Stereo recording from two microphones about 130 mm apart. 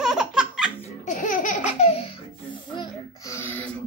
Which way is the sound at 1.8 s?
50° left (ahead or behind).